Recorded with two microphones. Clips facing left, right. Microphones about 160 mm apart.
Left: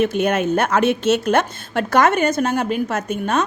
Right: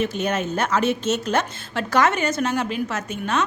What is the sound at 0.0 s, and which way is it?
A woman's voice, 55° left (ahead or behind).